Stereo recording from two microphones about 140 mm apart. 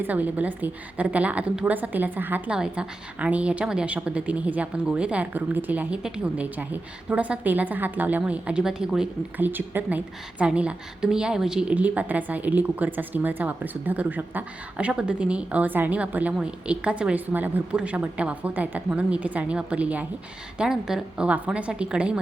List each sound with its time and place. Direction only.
0.0 s a woman's voice: 10° right (ahead or behind)